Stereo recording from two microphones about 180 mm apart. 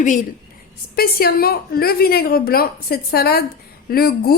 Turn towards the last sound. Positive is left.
turn(degrees=55)  # may be behind; listen again after turning